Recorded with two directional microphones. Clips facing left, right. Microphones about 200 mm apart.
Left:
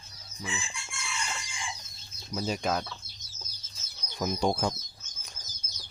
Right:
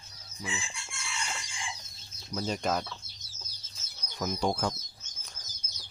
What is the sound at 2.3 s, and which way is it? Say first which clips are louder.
Speech: left 1 dB; 5° left (ahead or behind).